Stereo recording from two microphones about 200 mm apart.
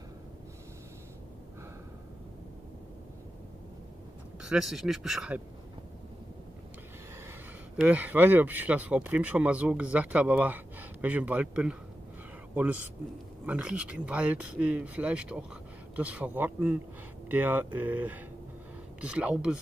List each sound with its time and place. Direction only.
4.4 s speech: 5° right (ahead or behind)
7.7 s speech: 5° right (ahead or behind)
13.5 s speech: 5° right (ahead or behind)